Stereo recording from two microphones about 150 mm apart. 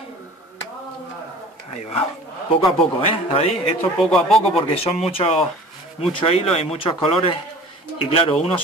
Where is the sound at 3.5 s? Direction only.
Centre (ahead or behind).